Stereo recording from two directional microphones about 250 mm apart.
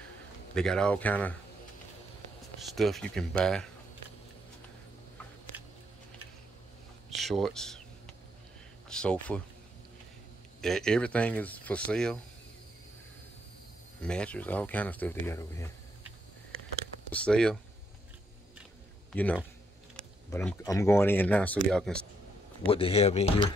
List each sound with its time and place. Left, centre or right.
0.6 s speech: centre
2.7 s speech: centre
5.5 s a sound: centre
7.2 s speech: centre
8.8 s speech: centre
10.6 s speech: centre
14.0 s speech: centre
17.1 s speech: centre
20.2 s speech: centre
22.7 s speech: left